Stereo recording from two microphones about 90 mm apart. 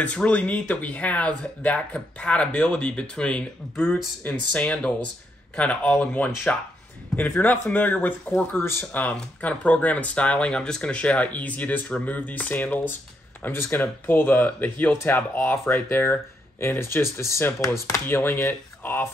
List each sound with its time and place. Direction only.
0.0 s speech: 15° left (ahead or behind)